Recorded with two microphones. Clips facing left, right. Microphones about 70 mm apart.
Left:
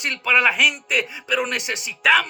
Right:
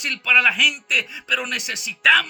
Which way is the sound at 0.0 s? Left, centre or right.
Left.